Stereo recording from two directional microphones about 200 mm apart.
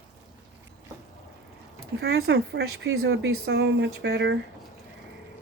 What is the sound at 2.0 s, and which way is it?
Speech, 55° right (ahead or behind).